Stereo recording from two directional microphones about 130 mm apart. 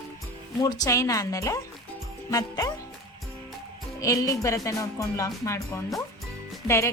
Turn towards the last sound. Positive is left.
turn(degrees=20)  # may be behind; listen again after turning